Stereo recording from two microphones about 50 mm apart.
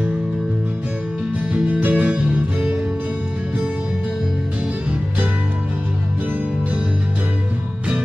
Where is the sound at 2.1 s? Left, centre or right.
Centre.